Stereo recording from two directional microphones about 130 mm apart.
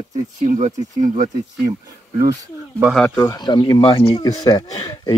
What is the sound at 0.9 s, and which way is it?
Speech, 85° right.